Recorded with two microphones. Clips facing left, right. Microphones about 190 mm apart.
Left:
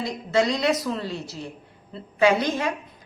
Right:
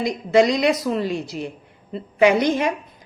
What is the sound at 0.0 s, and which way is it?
A woman's voice, 15° right (ahead or behind).